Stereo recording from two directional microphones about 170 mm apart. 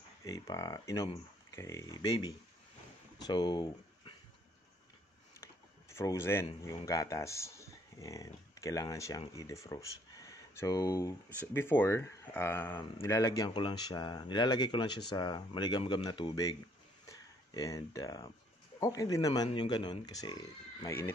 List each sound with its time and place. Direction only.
0.2 s speech: 20° left (ahead or behind)
5.4 s speech: 15° left (ahead or behind)
17.6 s speech: 20° left (ahead or behind)